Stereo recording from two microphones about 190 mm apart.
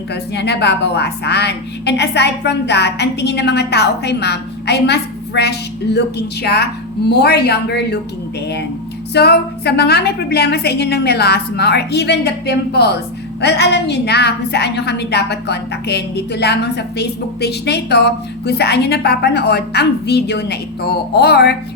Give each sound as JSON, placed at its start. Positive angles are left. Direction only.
{"t": 0.1, "sound": "a woman's voice", "side_deg": 60}
{"t": 9.1, "sound": "a woman's voice", "side_deg": 60}